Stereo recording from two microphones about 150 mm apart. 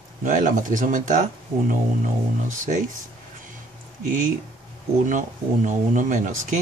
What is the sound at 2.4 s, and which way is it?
Speech, 55° right (ahead or behind).